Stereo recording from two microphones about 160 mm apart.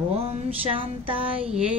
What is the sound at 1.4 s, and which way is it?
Music, 5° right (ahead or behind).